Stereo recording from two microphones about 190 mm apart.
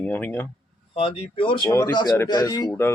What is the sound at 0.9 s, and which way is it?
Speech, 30° left (ahead or behind).